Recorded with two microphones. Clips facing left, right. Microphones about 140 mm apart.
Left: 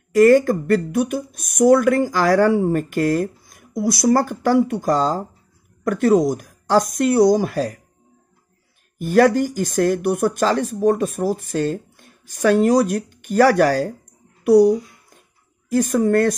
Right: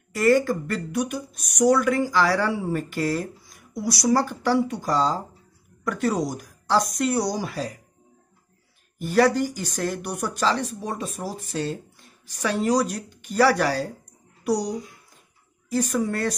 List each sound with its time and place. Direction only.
0.1 s speech: 45° left (ahead or behind)
8.9 s a child's voice: 50° left (ahead or behind)
15.7 s speech: 55° left (ahead or behind)